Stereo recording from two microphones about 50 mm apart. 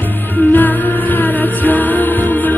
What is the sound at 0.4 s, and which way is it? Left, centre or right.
Music, left.